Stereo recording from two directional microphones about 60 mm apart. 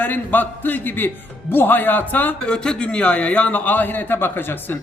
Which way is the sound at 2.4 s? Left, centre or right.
Centre.